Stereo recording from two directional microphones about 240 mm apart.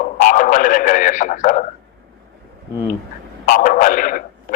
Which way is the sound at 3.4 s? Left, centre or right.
Left.